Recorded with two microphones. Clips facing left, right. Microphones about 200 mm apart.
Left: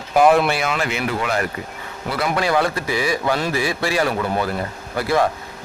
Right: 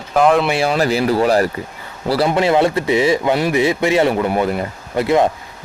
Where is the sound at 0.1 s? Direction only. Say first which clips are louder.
Right 1 dB; 5° left (ahead or behind).